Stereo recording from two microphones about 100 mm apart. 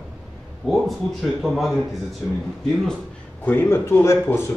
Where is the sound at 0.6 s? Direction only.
Centre (ahead or behind).